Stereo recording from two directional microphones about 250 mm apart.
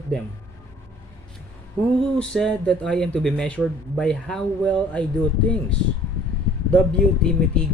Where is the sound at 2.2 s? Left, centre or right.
Centre.